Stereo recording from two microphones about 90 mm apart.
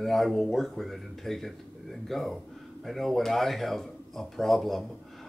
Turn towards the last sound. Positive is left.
turn(degrees=0)  # may be behind; listen again after turning